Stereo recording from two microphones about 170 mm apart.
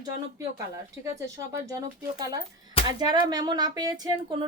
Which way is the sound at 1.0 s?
15° right (ahead or behind).